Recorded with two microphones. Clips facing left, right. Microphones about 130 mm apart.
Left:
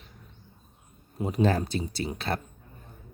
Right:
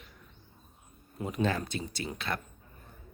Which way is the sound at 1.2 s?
35° left (ahead or behind).